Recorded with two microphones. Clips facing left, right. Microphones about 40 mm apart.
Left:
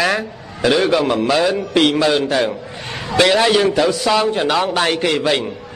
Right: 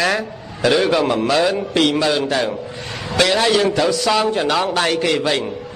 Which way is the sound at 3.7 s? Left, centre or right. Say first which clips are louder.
Left 1 dB; centre.